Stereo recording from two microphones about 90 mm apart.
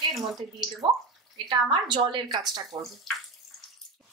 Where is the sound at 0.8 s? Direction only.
65° right (ahead or behind).